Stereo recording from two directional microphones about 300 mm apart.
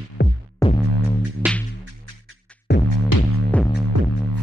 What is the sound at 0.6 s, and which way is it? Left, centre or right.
Music, centre.